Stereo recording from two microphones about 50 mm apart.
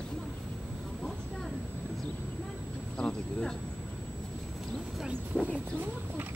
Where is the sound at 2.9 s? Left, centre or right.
Left.